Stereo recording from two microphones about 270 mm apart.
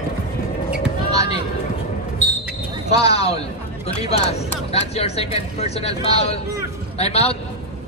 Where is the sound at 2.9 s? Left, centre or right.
Left.